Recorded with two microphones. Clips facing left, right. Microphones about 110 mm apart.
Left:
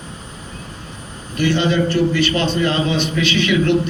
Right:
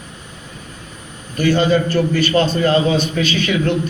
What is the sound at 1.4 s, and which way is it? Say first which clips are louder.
A man's voice: right 2 dB; 45° right (ahead or behind).